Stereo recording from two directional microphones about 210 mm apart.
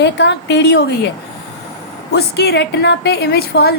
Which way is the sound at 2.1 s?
50° left (ahead or behind).